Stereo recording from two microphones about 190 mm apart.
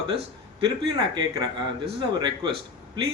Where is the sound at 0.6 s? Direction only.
25° right (ahead or behind).